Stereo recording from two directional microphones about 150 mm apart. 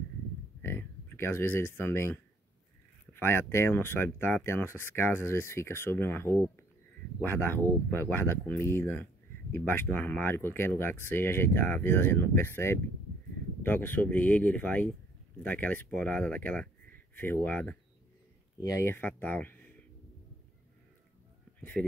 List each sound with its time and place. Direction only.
0.6 s a sound: 15° left (ahead or behind)
3.1 s speech: 15° left (ahead or behind)
21.5 s speech: 10° left (ahead or behind)